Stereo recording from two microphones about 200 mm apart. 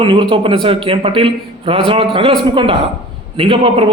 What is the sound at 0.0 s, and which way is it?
A man's voice, 25° right (ahead or behind).